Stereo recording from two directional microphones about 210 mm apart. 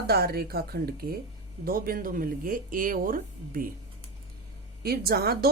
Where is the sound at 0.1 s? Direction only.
50° right (ahead or behind).